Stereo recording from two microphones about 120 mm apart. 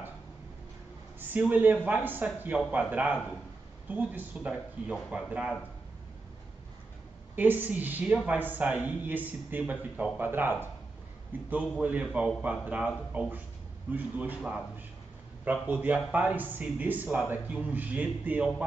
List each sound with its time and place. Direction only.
1.5 s a woman's voice: 15° right (ahead or behind)
7.3 s a woman's voice: 15° right (ahead or behind)
15.6 s a woman's voice: 15° right (ahead or behind)